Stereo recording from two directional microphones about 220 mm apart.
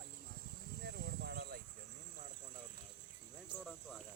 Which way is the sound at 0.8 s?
50° right (ahead or behind).